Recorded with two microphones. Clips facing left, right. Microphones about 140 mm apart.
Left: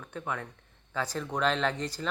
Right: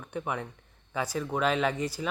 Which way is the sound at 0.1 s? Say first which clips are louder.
Right 3 dB; 15° right (ahead or behind).